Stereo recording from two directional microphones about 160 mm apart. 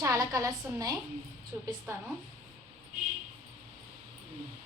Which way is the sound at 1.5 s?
15° right (ahead or behind).